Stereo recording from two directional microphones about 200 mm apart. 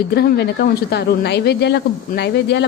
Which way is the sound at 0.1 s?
55° left (ahead or behind).